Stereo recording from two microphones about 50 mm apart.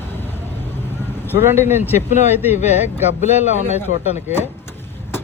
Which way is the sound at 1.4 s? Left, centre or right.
Right.